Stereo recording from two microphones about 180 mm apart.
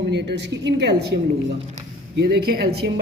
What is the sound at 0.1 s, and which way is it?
A woman's voice, 70° right (ahead or behind).